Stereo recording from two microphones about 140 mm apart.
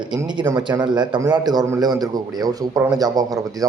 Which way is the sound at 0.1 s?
30° right (ahead or behind).